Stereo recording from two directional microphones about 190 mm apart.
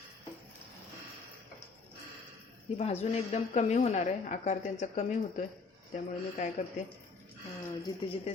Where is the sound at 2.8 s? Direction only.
35° left (ahead or behind).